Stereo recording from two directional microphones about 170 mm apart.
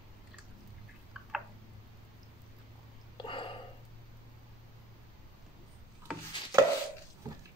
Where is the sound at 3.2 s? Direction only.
30° left (ahead or behind).